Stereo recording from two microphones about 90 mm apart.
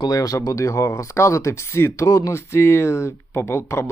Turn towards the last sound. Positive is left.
turn(degrees=30)  # may be behind; listen again after turning